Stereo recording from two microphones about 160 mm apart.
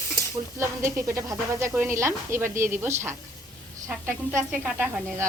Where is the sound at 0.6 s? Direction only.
15° right (ahead or behind).